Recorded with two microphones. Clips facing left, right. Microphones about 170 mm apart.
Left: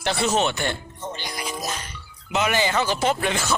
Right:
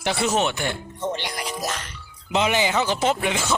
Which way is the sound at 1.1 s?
75° right (ahead or behind).